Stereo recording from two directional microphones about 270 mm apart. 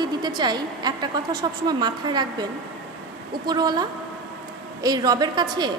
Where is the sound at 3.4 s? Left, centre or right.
Centre.